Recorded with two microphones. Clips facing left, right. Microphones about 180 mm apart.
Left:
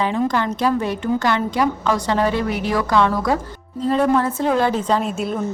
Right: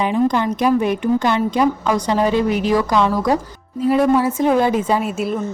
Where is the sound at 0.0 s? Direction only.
15° right (ahead or behind).